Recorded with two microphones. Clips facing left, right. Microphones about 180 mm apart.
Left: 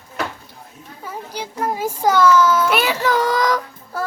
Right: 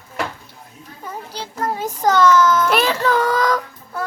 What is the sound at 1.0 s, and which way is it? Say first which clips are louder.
Children playing: left 1 dB; 10° left (ahead or behind).